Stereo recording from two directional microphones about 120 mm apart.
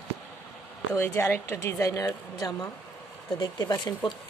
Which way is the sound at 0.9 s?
20° left (ahead or behind).